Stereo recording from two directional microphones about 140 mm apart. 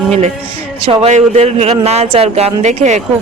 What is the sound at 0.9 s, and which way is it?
Speech, 50° right (ahead or behind).